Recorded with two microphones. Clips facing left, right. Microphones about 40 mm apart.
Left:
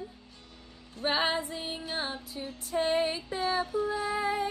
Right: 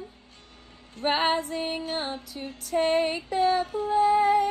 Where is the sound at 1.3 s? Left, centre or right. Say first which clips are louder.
Right 6 dB; right.